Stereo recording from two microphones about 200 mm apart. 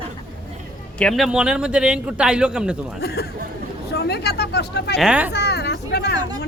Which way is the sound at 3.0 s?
50° left (ahead or behind).